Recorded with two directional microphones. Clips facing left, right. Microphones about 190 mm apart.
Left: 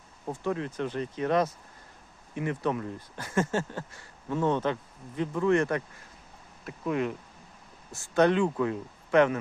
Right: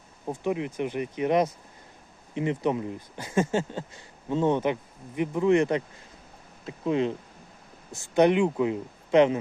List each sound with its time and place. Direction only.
0.3 s speech: 15° right (ahead or behind)